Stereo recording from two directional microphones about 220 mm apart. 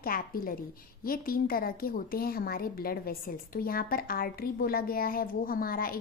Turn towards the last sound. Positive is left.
turn(degrees=40)  # may be behind; listen again after turning